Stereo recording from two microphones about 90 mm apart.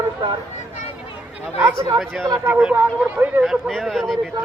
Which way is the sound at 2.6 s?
20° right (ahead or behind).